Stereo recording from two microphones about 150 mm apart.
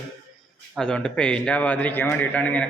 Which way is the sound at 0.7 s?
5° left (ahead or behind).